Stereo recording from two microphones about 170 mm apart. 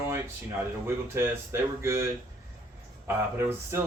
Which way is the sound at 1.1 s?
15° right (ahead or behind).